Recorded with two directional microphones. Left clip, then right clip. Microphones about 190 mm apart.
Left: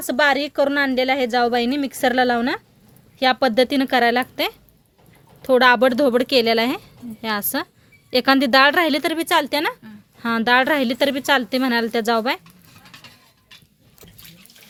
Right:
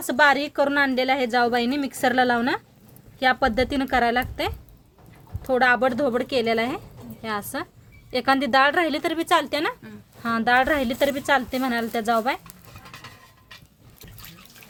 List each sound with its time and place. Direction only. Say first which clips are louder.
0.0 s a woman's voice: left 1 dB; 40° left (ahead or behind)